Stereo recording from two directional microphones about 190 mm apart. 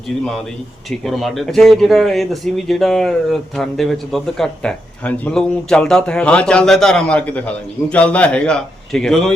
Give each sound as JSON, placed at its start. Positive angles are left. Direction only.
{"t": 0.9, "sound": "speech", "side_deg": 0}